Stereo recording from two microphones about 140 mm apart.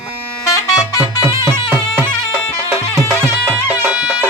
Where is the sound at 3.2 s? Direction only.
15° right (ahead or behind).